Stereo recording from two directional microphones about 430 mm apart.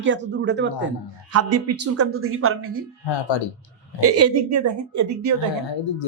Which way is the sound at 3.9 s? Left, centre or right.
Right.